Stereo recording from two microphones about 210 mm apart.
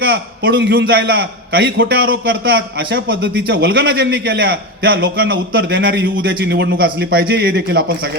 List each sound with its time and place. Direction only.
0.0 s a man's voice: 50° right (ahead or behind)